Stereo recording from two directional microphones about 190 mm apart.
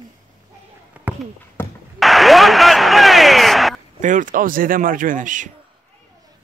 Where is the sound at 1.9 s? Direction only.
Centre (ahead or behind).